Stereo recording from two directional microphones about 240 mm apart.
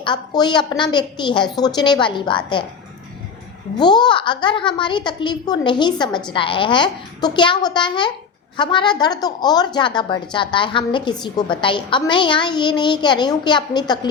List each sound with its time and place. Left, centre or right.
0.0 s a woman's voice: centre
3.8 s a woman's voice: centre